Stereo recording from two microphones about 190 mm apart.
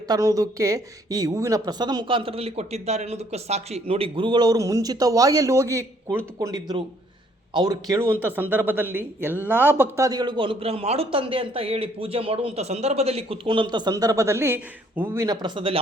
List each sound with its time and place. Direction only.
0.1 s speech: 15° right (ahead or behind)
8.2 s speech: 10° right (ahead or behind); by 15.8 s 25° right (ahead or behind)